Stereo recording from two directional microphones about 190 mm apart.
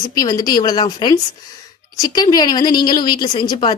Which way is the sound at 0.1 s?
20° left (ahead or behind).